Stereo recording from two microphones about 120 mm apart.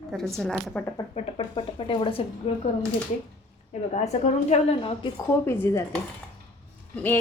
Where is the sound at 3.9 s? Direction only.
65° left (ahead or behind).